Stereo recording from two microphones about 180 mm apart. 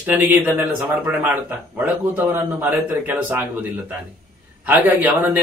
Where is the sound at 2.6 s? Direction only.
10° right (ahead or behind).